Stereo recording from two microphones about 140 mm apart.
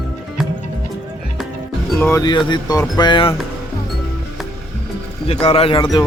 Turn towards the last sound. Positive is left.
turn(degrees=35)  # may be behind; listen again after turning